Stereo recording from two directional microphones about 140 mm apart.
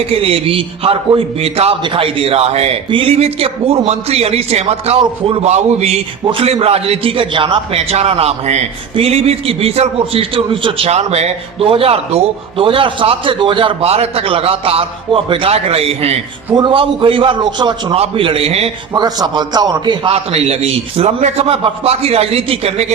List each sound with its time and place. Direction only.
0.1 s a man's voice: 40° right (ahead or behind)
16.6 s a man's voice: 35° right (ahead or behind)
17.9 s a man's voice: 45° right (ahead or behind)
18.9 s a man's voice: 30° right (ahead or behind)
20.1 s a man's voice: 45° right (ahead or behind)